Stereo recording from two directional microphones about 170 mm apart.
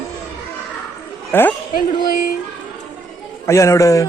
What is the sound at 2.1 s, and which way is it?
Speech, 55° left (ahead or behind).